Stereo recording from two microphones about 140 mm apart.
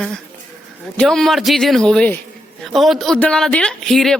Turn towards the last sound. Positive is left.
turn(degrees=0)  # may be behind; listen again after turning